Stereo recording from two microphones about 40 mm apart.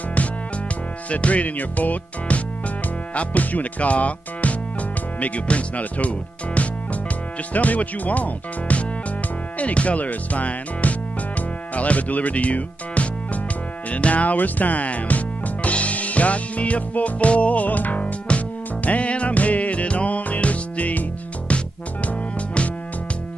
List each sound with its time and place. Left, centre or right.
1.1 s speech: left
11.7 s music: left
13.8 s speech: left
18.9 s music: left